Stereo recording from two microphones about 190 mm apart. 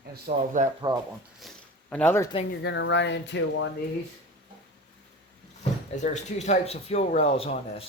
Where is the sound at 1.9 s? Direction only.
10° left (ahead or behind).